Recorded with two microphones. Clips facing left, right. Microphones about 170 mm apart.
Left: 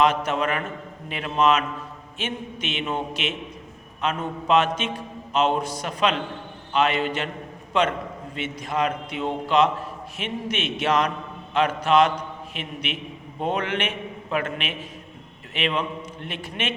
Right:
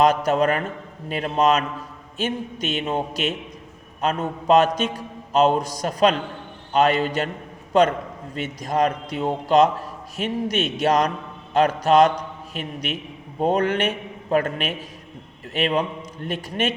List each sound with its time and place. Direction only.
0.0 s a man's voice: 40° right (ahead or behind)